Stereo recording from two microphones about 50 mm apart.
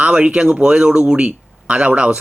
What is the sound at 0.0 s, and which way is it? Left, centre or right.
Speech, right.